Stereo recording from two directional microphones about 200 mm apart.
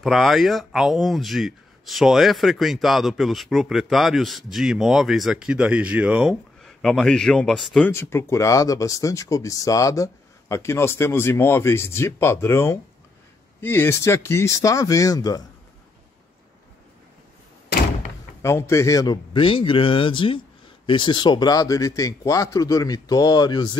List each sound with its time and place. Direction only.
0.0 s speech: centre (ahead or behind)
7.9 s speech: 10° left (ahead or behind)
18.4 s a man's voice: 15° left (ahead or behind)